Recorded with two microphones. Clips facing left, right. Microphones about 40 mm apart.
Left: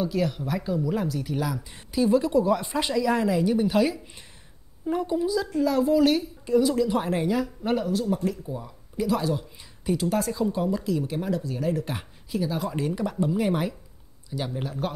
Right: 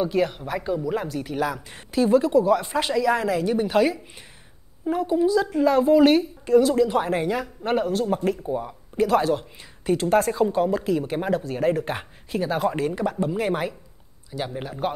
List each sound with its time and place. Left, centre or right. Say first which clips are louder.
0.0 s speech: right 3 dB; right
1.5 s speech: right 1 dB; right
2.4 s speech: right 3 dB; centre
5.6 s speech: right 4 dB; right
7.9 s speech: right 3 dB; right
13.3 s speech: right 1 dB; centre